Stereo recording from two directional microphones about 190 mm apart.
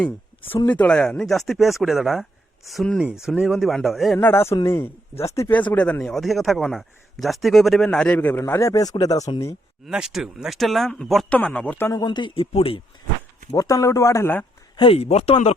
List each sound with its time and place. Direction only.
0.6 s a man's voice: 10° left (ahead or behind)
4.2 s a man's voice: 10° left (ahead or behind)
9.8 s a man's voice: 5° right (ahead or behind); by 12.8 s 30° left (ahead or behind)
13.5 s speech: 15° left (ahead or behind)
14.8 s speech: 30° left (ahead or behind)